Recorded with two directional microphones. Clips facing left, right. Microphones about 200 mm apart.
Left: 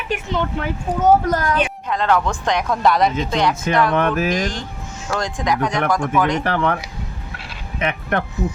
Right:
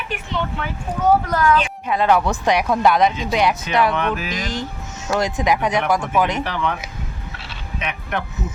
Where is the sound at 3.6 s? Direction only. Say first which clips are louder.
Left 2 dB; 50° left (ahead or behind).